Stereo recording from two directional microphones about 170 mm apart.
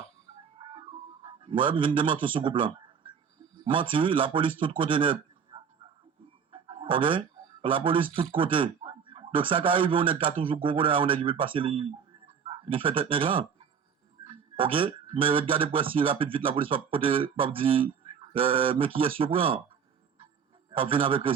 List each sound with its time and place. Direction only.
0.6 s music: 30° right (ahead or behind)
3.7 s a man's voice: 30° right (ahead or behind)
20.7 s a man's voice: 30° right (ahead or behind)